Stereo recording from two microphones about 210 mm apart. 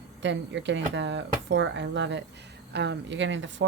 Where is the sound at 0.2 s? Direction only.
60° right (ahead or behind).